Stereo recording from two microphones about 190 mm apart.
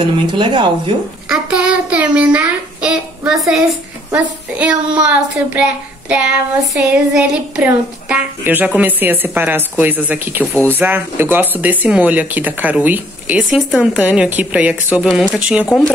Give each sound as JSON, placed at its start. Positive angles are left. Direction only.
{"t": 0.0, "sound": "speech", "side_deg": -25}
{"t": 1.3, "sound": "a child's voice", "side_deg": -5}